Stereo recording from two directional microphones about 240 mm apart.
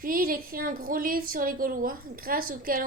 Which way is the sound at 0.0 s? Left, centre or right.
Right.